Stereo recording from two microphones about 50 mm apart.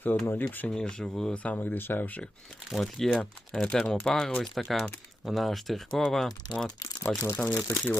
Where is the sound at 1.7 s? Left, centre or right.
Left.